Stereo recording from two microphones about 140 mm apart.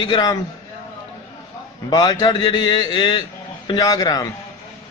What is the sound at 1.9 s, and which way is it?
A man's voice, 25° left (ahead or behind).